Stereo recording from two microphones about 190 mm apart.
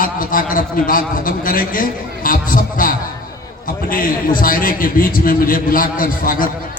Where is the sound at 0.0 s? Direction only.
45° left (ahead or behind).